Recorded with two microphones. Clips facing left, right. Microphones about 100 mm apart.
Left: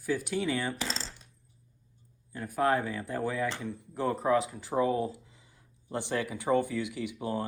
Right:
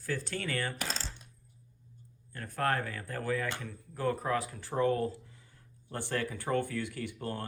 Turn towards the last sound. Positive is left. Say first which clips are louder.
# left 4 dB
turn(degrees=10)  # may be behind; listen again after turning